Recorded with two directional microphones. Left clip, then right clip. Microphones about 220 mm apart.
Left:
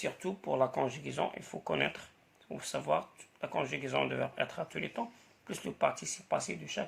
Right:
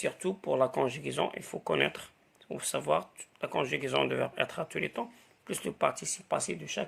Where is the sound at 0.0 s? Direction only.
40° right (ahead or behind).